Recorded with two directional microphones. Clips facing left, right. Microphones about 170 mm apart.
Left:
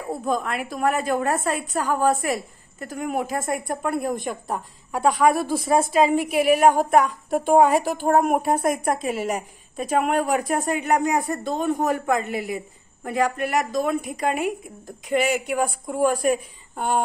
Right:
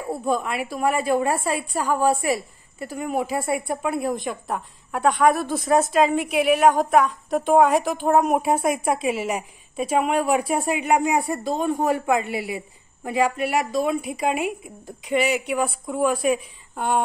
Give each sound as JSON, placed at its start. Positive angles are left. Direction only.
{"t": 0.2, "sound": "a woman's voice", "side_deg": -5}